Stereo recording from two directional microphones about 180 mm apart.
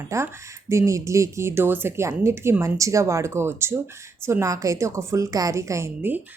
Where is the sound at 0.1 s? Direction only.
15° right (ahead or behind).